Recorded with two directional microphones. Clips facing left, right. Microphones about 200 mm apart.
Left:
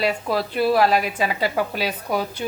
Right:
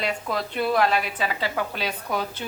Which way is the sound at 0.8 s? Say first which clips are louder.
Left 2 dB; 40° left (ahead or behind).